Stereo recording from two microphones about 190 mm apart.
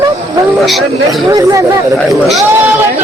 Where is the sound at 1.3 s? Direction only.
20° right (ahead or behind).